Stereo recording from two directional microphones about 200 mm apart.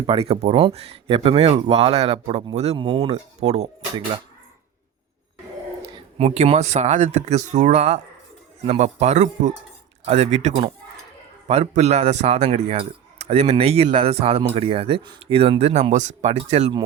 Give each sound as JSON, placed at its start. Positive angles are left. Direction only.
{"t": 0.0, "sound": "speech", "side_deg": -25}
{"t": 3.1, "sound": "speech", "side_deg": -35}
{"t": 6.1, "sound": "speech", "side_deg": -35}